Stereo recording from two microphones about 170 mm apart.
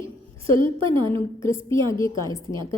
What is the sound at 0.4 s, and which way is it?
A woman's voice, 30° right (ahead or behind).